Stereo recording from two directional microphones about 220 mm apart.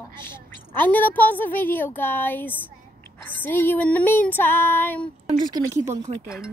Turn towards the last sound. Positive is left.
turn(degrees=-15)  # may be behind; listen again after turning